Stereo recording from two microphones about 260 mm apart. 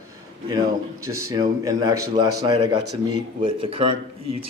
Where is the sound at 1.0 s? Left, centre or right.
Centre.